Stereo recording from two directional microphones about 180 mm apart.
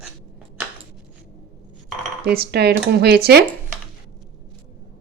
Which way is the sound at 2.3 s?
65° right (ahead or behind).